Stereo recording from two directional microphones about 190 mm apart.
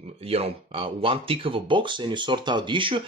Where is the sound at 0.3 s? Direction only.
30° right (ahead or behind).